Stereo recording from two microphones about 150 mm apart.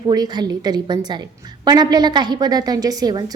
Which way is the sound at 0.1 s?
25° right (ahead or behind).